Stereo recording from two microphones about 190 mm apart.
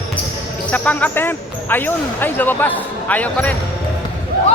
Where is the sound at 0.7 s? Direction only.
10° left (ahead or behind).